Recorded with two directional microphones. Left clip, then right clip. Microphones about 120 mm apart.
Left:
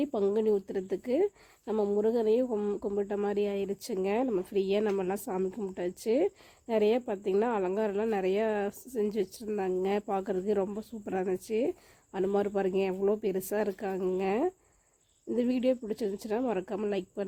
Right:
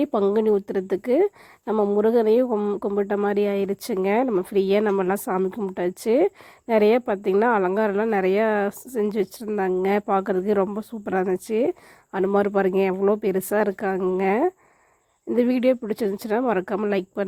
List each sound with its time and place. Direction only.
0.0 s speech: 35° right (ahead or behind)
2.8 s speech: 30° right (ahead or behind)